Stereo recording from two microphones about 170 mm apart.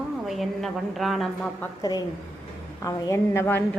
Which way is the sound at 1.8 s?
25° left (ahead or behind).